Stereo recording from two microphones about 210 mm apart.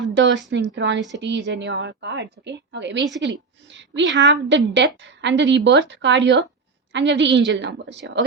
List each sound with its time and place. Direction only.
0.0 s a woman's voice: 55° right (ahead or behind)